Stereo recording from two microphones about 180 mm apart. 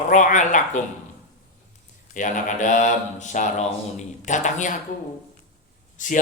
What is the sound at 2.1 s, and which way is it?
A man's voice, 45° left (ahead or behind).